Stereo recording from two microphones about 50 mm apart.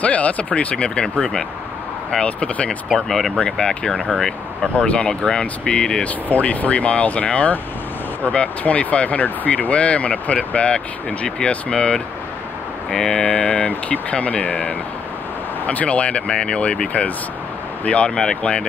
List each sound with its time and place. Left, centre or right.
0.0 s speech: left
2.2 s speech: left
2.9 s speech: centre
6.0 s speech: left; by 13.2 s centre
13.2 s speech: left